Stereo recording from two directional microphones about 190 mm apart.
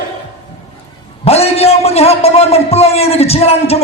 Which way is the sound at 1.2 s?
30° left (ahead or behind).